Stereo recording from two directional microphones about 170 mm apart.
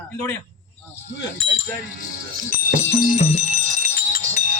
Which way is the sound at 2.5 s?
45° left (ahead or behind).